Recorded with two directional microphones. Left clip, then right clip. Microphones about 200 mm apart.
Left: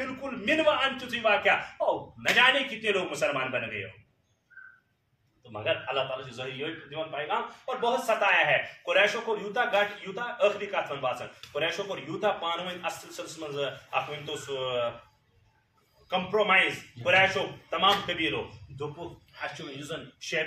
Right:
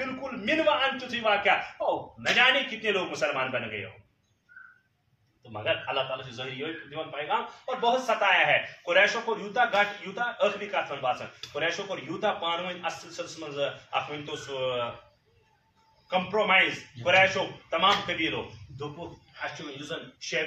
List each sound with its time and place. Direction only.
0.5 s a man's voice: 15° left (ahead or behind)
5.5 s a man's voice: 15° left (ahead or behind)
16.1 s a man's voice: 15° left (ahead or behind)
19.3 s a man's voice: 20° left (ahead or behind)